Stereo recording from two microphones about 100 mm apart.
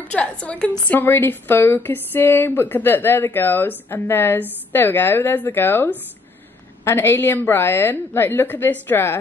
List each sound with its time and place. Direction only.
0.1 s a woman's voice: 10° left (ahead or behind)